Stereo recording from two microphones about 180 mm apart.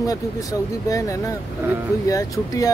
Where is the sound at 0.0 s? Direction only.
20° left (ahead or behind).